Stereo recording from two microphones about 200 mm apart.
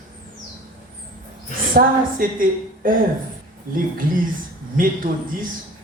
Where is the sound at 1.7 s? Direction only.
45° right (ahead or behind).